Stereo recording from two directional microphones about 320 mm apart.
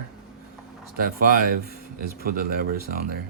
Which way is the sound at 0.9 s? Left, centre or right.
Right.